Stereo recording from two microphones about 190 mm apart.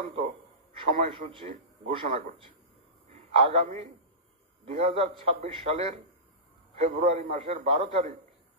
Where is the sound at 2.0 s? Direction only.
45° right (ahead or behind).